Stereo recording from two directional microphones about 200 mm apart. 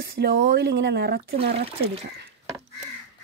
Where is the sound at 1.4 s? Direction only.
30° right (ahead or behind).